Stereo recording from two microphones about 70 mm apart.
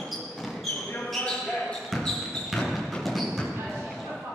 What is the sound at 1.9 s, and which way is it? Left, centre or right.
Basketball bounce, centre.